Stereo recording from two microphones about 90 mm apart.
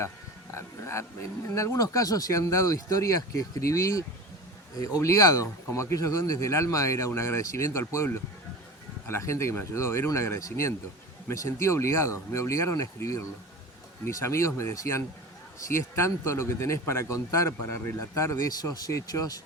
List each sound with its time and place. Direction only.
0.5 s a sound: 30° left (ahead or behind)
1.5 s speech: 35° left (ahead or behind)
18.6 s speech: 45° left (ahead or behind)